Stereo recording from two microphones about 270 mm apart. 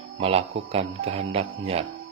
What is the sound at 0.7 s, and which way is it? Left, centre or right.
Speech, right.